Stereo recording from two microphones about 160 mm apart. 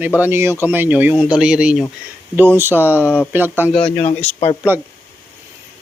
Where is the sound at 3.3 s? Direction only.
10° right (ahead or behind).